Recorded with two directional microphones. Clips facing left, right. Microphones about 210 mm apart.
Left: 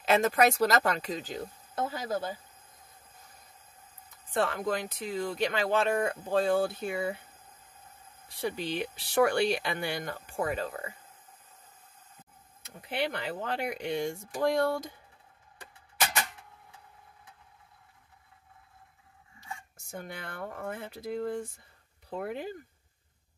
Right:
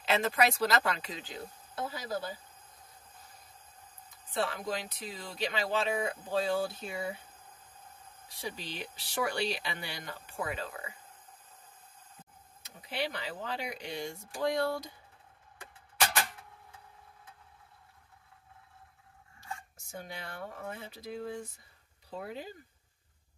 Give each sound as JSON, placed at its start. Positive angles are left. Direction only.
{"t": 0.0, "sound": "speech", "side_deg": 45}
{"t": 4.3, "sound": "speech", "side_deg": 50}
{"t": 8.4, "sound": "speech", "side_deg": 60}
{"t": 12.6, "sound": "speech", "side_deg": 55}
{"t": 19.9, "sound": "speech", "side_deg": 50}